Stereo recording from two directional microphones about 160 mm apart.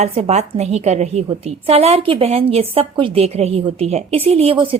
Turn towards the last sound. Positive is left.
turn(degrees=-35)  # may be behind; listen again after turning